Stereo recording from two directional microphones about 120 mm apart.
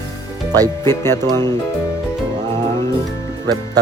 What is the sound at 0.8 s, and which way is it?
Speech, 20° left (ahead or behind).